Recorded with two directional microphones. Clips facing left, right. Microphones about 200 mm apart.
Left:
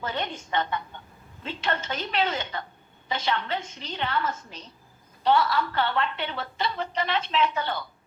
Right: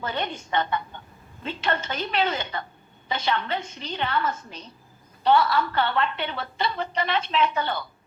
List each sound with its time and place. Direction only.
0.0 s a woman's voice: 60° right (ahead or behind)
1.6 s a woman's voice: 60° right (ahead or behind)
5.2 s a woman's voice: 60° right (ahead or behind)